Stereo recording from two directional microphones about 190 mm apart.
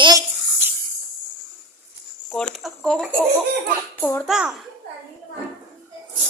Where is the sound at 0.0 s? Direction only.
20° right (ahead or behind).